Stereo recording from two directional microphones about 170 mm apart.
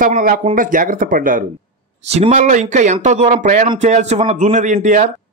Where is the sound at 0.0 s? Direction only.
55° right (ahead or behind).